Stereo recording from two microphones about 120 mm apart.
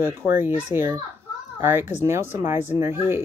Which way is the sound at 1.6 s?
20° right (ahead or behind).